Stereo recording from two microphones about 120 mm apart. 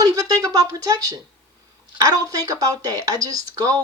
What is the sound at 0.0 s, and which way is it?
A woman's voice, 30° right (ahead or behind).